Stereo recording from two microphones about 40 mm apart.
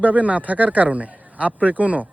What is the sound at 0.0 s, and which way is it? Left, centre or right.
Speech, right.